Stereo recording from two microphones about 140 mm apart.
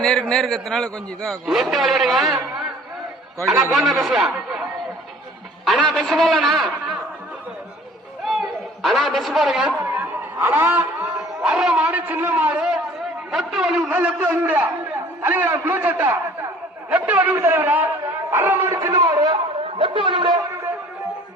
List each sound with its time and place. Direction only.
0.0 s a man's voice: 5° left (ahead or behind)
3.6 s a man's voice: centre (ahead or behind)
8.2 s a sound: centre (ahead or behind)
10.4 s speech: 15° right (ahead or behind)
11.2 s a man's voice: centre (ahead or behind); by 20.7 s 30° right (ahead or behind)